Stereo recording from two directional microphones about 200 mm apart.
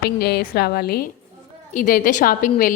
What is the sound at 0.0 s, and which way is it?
A woman's voice, 55° left (ahead or behind).